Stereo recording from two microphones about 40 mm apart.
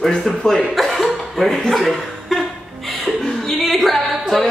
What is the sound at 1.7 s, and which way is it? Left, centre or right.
Chuckle, centre.